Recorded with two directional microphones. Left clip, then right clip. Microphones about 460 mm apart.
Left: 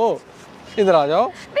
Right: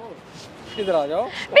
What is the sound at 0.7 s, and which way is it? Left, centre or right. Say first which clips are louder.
Speech: left 6 dB; left.